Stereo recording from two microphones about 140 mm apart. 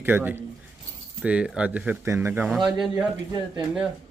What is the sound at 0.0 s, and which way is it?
Speech, 15° right (ahead or behind).